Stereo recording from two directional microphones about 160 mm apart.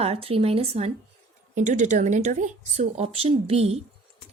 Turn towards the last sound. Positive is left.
turn(degrees=-40)  # may be behind; listen again after turning